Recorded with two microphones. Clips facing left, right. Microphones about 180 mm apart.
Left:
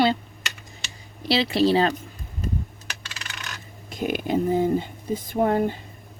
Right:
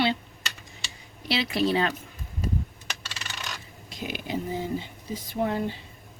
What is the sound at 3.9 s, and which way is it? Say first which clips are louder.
Speech: left 8 dB; 50° left (ahead or behind).